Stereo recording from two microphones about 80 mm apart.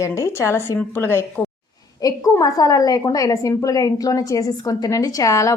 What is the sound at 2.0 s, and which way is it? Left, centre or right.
A woman's voice, left.